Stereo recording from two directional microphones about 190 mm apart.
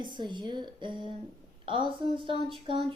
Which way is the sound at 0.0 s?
25° right (ahead or behind).